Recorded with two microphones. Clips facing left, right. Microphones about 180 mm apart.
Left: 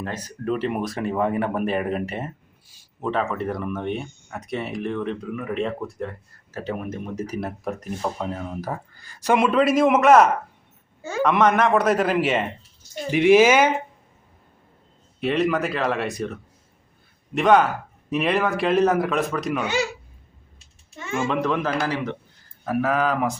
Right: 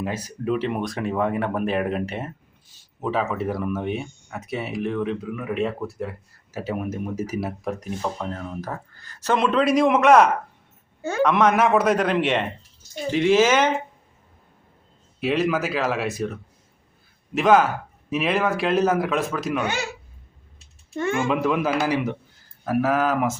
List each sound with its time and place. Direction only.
0.0 s a man's voice: 10° right (ahead or behind)
13.1 s a man's voice: 15° left (ahead or behind)
15.2 s speech: centre (ahead or behind)
19.6 s speech: 55° right (ahead or behind)
20.9 s speech: 60° right (ahead or behind)
21.2 s a man's voice: 5° right (ahead or behind)